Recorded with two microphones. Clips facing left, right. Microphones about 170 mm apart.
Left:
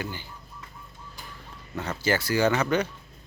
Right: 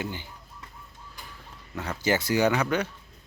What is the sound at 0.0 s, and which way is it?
Speech, 20° right (ahead or behind).